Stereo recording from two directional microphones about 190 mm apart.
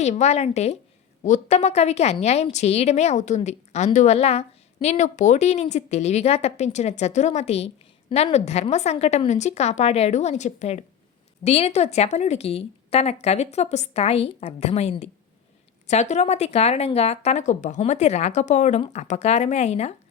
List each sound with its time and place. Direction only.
0.0 s a woman's voice: 35° left (ahead or behind)